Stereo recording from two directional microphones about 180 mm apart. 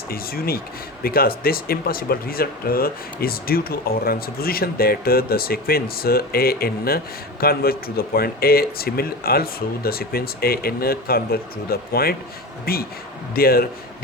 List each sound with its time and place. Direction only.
0.1 s speech: 55° left (ahead or behind)